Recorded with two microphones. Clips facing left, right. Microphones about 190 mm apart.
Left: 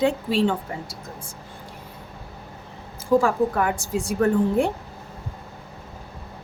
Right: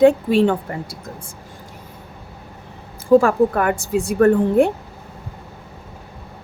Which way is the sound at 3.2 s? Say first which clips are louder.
Right 5 dB; 60° right (ahead or behind).